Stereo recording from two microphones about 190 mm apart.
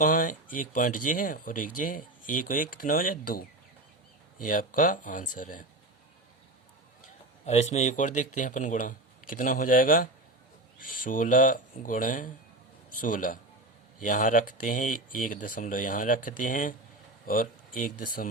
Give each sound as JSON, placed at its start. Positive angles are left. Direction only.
{"t": 0.0, "sound": "speech", "side_deg": 45}
{"t": 4.4, "sound": "speech", "side_deg": 45}
{"t": 7.4, "sound": "speech", "side_deg": 35}